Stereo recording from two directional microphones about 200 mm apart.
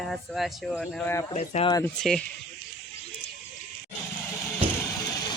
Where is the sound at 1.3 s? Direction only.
30° left (ahead or behind).